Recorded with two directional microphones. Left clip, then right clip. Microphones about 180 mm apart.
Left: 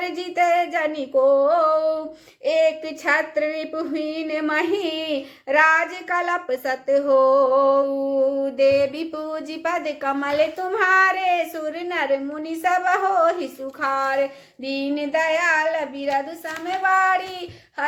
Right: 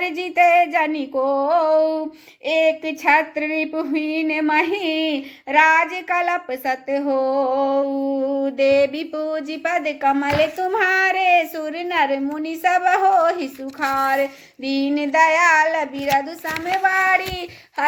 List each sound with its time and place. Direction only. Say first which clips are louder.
0.0 s child singing: right 5 dB; 15° right (ahead or behind)
1.4 s female singing: right 1 dB; 15° right (ahead or behind)
2.4 s speech: right 1 dB; 20° right (ahead or behind)